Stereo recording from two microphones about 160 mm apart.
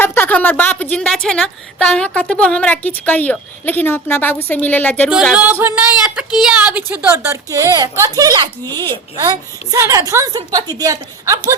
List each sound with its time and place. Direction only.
0.0 s a woman's voice: 10° left (ahead or behind)
5.1 s a woman's voice: 5° right (ahead or behind); by 11.3 s 20° right (ahead or behind)